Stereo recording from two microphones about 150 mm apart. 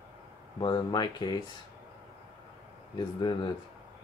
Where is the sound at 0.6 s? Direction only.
30° left (ahead or behind).